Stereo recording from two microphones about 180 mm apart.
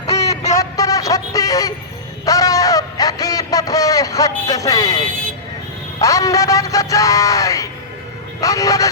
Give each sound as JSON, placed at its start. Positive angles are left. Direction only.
{"t": 0.5, "sound": "vehicle", "side_deg": 20}
{"t": 2.2, "sound": "a sound", "side_deg": 20}
{"t": 6.0, "sound": "music", "side_deg": 20}
{"t": 8.4, "sound": "speech", "side_deg": 20}